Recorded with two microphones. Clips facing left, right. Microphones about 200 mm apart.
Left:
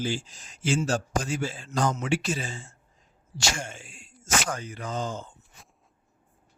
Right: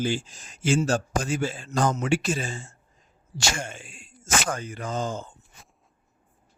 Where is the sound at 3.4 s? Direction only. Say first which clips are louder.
Right 2 dB; 55° right (ahead or behind).